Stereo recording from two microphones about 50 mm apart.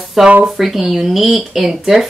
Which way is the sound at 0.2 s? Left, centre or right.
Centre.